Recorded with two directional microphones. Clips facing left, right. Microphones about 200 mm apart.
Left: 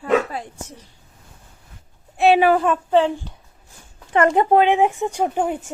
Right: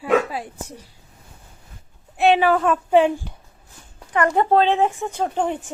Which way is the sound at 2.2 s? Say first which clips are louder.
Left 1 dB; centre (ahead or behind).